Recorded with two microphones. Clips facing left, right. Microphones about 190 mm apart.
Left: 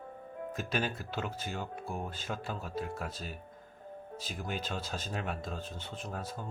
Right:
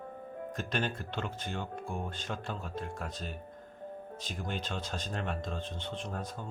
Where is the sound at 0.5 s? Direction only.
5° left (ahead or behind).